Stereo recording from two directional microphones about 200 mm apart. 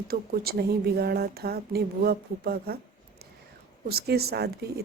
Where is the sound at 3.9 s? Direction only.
50° right (ahead or behind).